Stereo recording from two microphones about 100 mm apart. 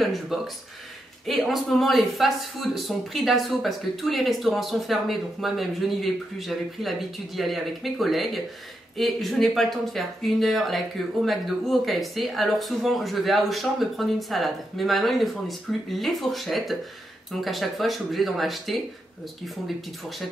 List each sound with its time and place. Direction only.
0.0 s speech: centre (ahead or behind)